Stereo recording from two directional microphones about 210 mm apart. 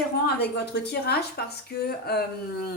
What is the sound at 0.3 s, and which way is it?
Speech, 50° left (ahead or behind).